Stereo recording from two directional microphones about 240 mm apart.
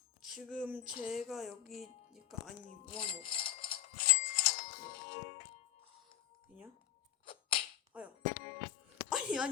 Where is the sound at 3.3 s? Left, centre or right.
Left.